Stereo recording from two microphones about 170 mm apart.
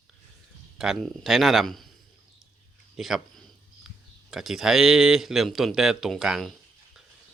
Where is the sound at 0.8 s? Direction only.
Centre (ahead or behind).